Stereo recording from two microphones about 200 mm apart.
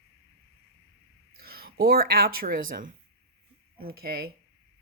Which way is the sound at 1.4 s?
50° right (ahead or behind).